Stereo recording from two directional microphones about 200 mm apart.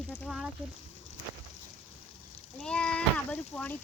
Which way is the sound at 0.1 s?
5° left (ahead or behind).